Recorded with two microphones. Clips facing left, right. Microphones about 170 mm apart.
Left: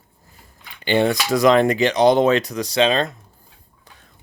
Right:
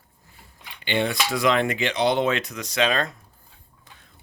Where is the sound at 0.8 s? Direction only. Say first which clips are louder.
Left 6 dB; 40° left (ahead or behind).